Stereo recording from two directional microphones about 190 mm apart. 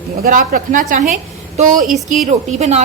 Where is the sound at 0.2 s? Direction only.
45° right (ahead or behind).